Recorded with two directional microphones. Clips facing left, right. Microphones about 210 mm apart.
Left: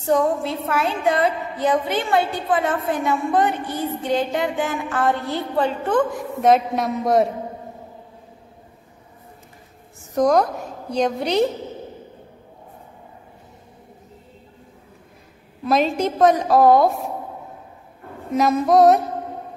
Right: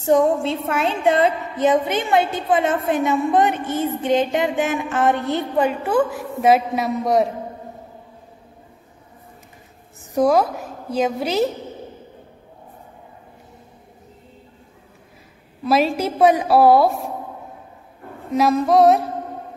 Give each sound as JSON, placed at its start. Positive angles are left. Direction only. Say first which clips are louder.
{"t": 0.0, "sound": "a woman's voice", "louder": "right 3 dB", "side_deg": -20}
{"t": 10.1, "sound": "a woman's voice", "louder": "right 1 dB", "side_deg": -5}
{"t": 15.6, "sound": "a woman's voice", "louder": "right 1 dB", "side_deg": -5}
{"t": 18.3, "sound": "a woman's voice", "louder": "even", "side_deg": 0}